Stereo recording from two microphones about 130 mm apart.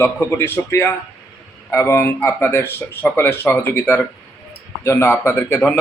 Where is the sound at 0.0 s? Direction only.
15° left (ahead or behind).